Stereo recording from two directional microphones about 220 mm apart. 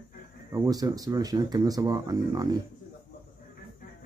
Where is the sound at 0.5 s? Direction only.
15° right (ahead or behind).